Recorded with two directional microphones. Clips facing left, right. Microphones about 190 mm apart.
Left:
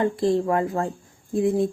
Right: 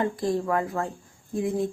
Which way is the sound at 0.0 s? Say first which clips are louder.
Left 5 dB; 25° left (ahead or behind).